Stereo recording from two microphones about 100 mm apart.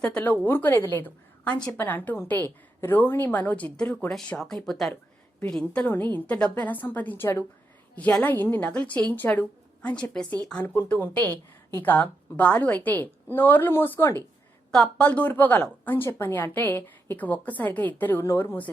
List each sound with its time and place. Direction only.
0.0 s a woman's voice: 10° left (ahead or behind)
14.7 s a woman's voice: 10° left (ahead or behind); by 18.5 s 25° left (ahead or behind)